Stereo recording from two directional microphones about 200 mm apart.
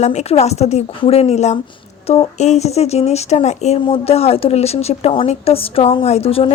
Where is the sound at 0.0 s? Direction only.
35° left (ahead or behind).